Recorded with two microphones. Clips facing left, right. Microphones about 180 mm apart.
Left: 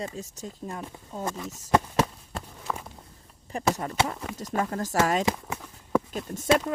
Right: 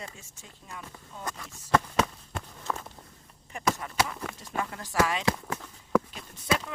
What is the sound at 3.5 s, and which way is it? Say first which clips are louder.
Speech: left 3 dB; 35° left (ahead or behind).